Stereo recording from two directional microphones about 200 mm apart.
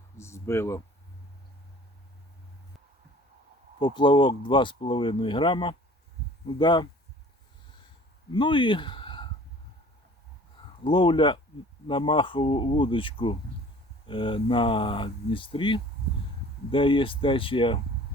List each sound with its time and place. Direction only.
0.2 s speech: 15° left (ahead or behind)
3.8 s speech: 20° left (ahead or behind)
8.3 s speech: 25° left (ahead or behind)
10.8 s speech: 25° left (ahead or behind)